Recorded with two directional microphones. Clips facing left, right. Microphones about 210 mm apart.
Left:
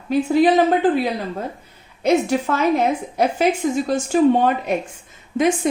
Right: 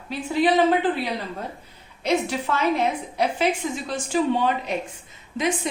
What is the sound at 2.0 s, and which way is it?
A woman's voice, 45° left (ahead or behind).